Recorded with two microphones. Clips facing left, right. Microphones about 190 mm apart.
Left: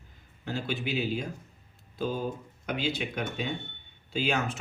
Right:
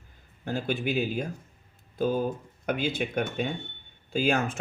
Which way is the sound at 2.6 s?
50° right (ahead or behind).